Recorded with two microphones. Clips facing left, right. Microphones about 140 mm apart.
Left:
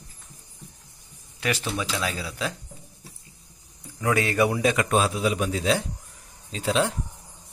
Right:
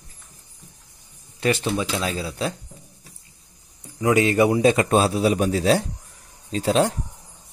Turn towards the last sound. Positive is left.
turn(degrees=-40)  # may be behind; listen again after turning